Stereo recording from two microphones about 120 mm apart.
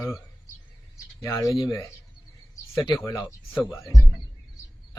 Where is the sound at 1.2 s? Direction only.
25° left (ahead or behind).